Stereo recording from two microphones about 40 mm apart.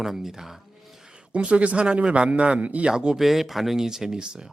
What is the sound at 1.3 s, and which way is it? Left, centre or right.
A man's voice, right.